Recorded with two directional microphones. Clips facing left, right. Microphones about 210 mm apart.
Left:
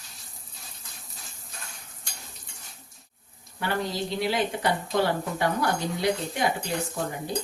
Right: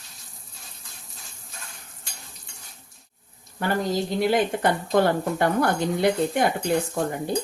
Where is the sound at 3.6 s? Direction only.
45° right (ahead or behind).